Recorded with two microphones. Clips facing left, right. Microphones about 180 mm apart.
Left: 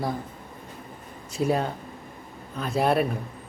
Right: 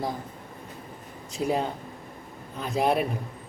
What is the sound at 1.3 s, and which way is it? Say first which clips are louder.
Speech: left 2 dB; 15° right (ahead or behind).